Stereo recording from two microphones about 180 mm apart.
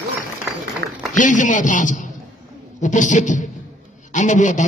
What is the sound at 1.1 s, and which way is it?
A man's voice, 45° left (ahead or behind).